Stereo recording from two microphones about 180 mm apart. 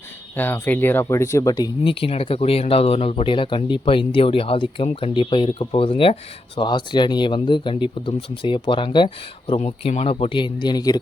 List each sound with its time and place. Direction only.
0.3 s speech: 10° left (ahead or behind)